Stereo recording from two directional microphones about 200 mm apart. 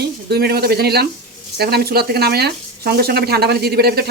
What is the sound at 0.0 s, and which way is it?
Speech, 55° right (ahead or behind).